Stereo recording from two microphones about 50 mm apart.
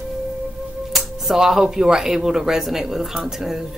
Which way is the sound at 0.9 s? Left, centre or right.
Centre.